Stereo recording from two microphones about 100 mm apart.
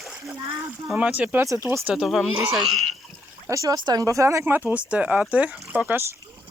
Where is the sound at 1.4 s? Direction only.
30° right (ahead or behind).